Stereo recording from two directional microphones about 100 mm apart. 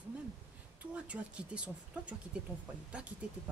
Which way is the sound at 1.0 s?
10° right (ahead or behind).